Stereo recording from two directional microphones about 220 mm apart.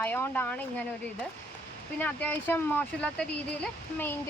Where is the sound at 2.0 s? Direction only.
10° left (ahead or behind).